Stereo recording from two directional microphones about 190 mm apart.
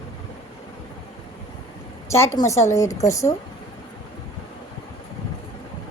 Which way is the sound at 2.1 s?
15° left (ahead or behind).